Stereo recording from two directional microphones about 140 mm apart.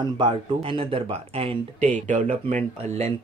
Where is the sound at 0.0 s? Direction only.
35° right (ahead or behind).